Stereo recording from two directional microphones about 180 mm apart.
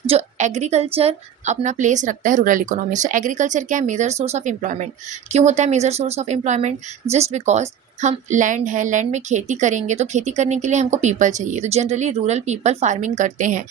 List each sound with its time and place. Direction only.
0.1 s a woman's voice: 40° right (ahead or behind)